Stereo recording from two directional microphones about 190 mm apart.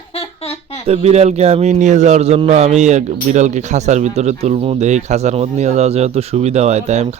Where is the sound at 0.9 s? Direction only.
35° right (ahead or behind).